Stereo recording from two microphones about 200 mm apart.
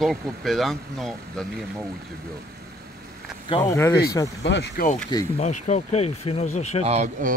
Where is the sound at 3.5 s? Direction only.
15° left (ahead or behind).